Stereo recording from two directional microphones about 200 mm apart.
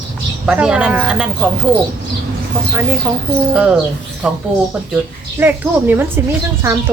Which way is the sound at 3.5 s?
5° right (ahead or behind).